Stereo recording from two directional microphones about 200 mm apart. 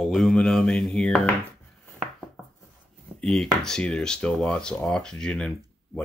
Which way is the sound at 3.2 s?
Centre (ahead or behind).